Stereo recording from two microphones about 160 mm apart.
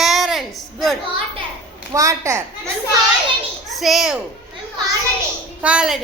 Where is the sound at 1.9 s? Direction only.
20° right (ahead or behind).